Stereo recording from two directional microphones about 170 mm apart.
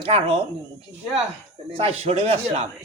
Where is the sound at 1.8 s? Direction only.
35° right (ahead or behind).